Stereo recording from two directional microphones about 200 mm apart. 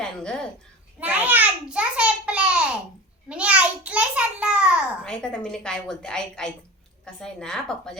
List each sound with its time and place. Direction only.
0.0 s speech: 5° left (ahead or behind)
0.9 s a sound: 10° right (ahead or behind)
7.0 s a woman's voice: 5° left (ahead or behind)